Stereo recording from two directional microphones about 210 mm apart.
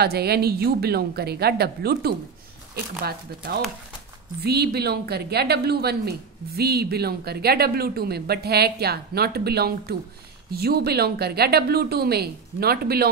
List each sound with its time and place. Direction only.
0.0 s a woman's voice: 50° right (ahead or behind)